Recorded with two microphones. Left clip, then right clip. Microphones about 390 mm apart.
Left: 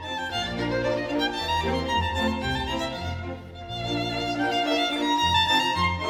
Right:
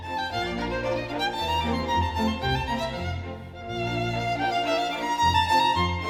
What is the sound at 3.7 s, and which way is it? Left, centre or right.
Music, centre.